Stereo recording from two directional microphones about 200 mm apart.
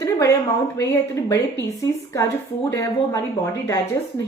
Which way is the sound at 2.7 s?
15° left (ahead or behind).